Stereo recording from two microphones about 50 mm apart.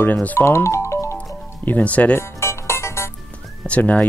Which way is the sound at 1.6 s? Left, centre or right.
Left.